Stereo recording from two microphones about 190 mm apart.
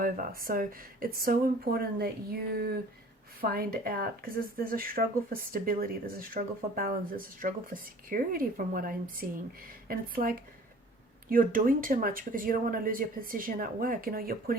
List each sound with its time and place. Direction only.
0.0 s speech: 50° right (ahead or behind)